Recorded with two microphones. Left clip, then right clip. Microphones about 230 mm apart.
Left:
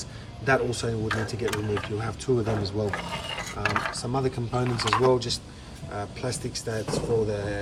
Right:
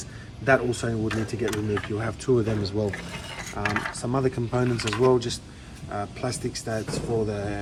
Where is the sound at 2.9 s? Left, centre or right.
Centre.